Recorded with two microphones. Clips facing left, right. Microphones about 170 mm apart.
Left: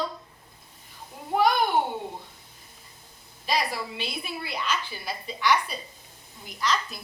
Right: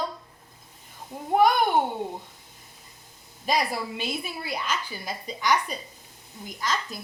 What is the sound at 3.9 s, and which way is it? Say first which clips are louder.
A woman's voice: right 2 dB; 45° right (ahead or behind).